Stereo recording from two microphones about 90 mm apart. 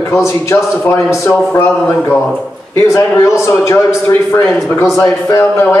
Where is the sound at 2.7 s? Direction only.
35° left (ahead or behind).